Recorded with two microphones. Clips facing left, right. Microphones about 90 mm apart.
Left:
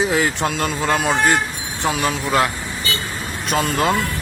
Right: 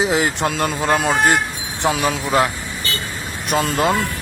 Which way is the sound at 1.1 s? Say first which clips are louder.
Right 1 dB; 20° right (ahead or behind).